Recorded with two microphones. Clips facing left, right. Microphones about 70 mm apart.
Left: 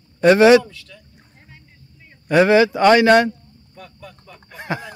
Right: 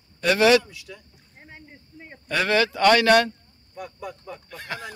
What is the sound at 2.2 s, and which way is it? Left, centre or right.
Speech, centre.